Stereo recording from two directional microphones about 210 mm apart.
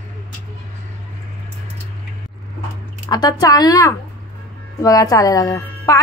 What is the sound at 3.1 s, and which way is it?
Speech, 20° left (ahead or behind).